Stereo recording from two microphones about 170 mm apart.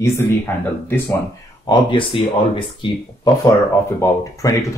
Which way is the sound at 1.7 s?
30° left (ahead or behind).